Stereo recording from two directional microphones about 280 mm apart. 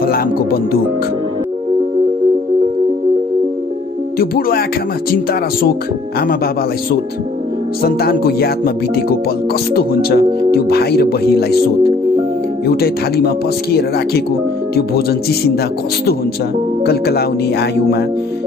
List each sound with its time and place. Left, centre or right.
0.0 s speech: left
4.2 s speech: left
7.8 s speech: left
12.6 s speech: left
16.8 s speech: left